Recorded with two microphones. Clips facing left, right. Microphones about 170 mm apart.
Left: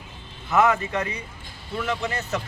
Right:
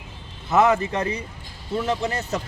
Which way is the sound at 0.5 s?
35° right (ahead or behind).